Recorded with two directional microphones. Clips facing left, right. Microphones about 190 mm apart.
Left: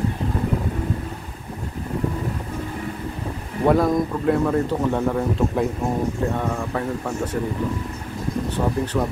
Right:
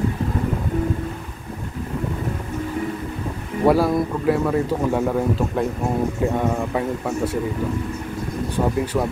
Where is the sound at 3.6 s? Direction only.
5° right (ahead or behind).